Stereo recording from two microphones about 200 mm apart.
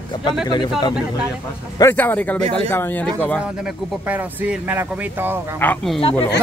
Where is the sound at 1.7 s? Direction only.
10° left (ahead or behind).